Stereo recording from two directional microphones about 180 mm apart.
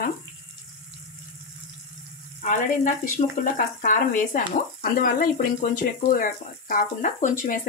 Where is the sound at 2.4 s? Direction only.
45° left (ahead or behind).